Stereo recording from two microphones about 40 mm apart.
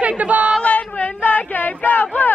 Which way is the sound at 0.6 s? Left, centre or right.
Left.